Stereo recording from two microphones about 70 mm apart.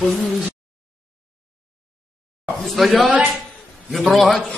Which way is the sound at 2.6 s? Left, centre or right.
Centre.